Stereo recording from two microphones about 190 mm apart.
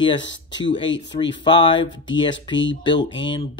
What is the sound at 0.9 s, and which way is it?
Speech, 70° left (ahead or behind).